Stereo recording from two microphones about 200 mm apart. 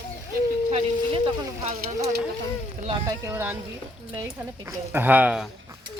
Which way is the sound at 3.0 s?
15° right (ahead or behind).